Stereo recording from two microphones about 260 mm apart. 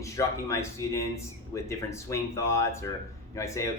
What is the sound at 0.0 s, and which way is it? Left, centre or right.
Speech, centre.